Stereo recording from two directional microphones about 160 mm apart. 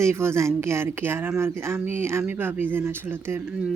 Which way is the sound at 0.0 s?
15° right (ahead or behind).